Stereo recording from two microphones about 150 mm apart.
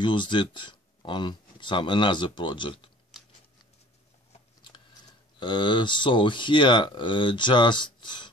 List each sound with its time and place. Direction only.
0.0 s speech: 30° left (ahead or behind)
5.4 s speech: 30° left (ahead or behind)